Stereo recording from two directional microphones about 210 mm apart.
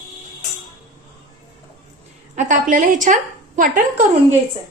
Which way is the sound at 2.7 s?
40° right (ahead or behind).